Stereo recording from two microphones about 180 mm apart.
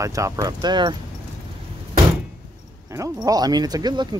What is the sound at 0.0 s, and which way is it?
Speech, 15° right (ahead or behind).